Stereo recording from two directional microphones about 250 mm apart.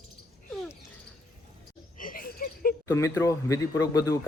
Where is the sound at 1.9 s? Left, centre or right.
Left.